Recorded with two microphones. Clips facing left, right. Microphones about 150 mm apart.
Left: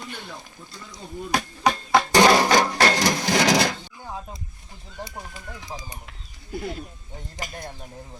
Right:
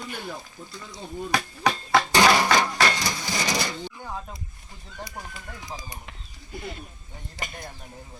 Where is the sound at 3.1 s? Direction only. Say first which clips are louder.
Left 8 dB; 75° left (ahead or behind).